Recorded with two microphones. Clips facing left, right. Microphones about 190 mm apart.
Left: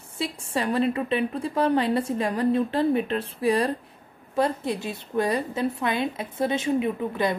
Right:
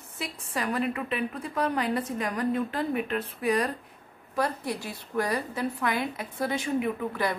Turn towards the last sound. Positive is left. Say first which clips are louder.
# left 3 dB
turn(degrees=20)  # may be behind; listen again after turning